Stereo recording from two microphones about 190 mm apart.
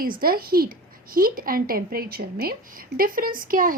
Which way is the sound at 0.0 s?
50° right (ahead or behind).